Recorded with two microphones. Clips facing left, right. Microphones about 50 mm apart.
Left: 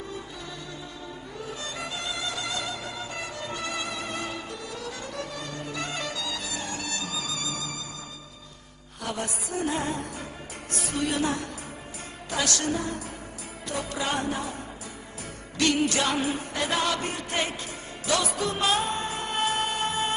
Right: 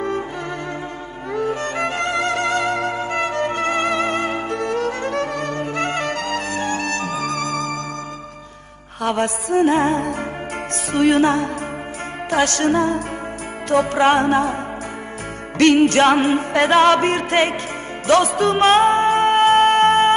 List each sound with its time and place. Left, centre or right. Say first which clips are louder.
1.3 s music: right 16 dB; right
9.0 s music: right 12 dB; right
15.5 s music: right 11 dB; right